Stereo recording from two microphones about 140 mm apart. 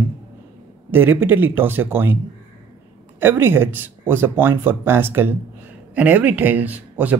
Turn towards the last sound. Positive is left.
turn(degrees=-10)  # may be behind; listen again after turning